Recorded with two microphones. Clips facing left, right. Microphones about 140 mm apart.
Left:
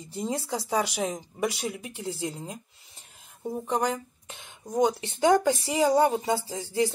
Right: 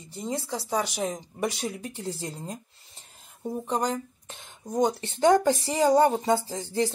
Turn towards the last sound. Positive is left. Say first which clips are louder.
# right 3 dB
turn(degrees=10)  # may be behind; listen again after turning